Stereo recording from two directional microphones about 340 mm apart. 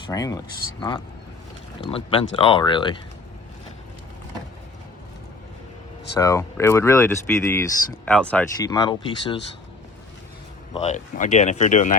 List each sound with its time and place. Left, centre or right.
0.1 s speech: centre
6.1 s speech: centre
10.8 s speech: left